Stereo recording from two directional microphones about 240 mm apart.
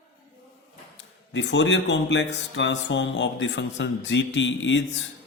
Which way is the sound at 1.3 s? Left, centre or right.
Left.